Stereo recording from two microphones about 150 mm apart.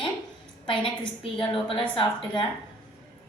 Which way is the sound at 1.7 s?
35° left (ahead or behind).